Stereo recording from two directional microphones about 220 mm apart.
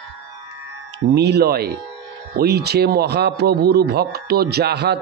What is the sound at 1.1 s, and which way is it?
A man's voice, 50° right (ahead or behind).